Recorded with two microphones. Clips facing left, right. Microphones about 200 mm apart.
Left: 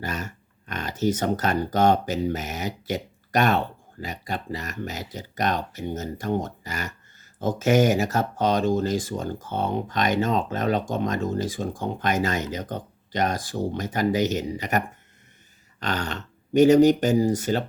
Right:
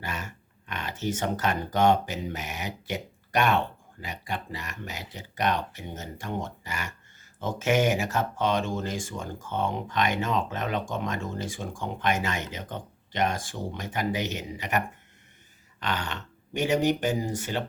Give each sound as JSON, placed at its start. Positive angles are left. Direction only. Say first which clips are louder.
{"t": 0.0, "sound": "speech", "louder": "left 5 dB", "side_deg": 40}